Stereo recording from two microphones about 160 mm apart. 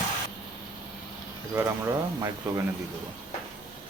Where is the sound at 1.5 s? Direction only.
15° right (ahead or behind).